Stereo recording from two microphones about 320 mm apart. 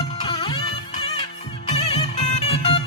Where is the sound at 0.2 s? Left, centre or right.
Centre.